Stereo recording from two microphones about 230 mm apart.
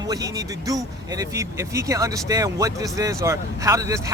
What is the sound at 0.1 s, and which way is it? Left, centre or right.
Speech, centre.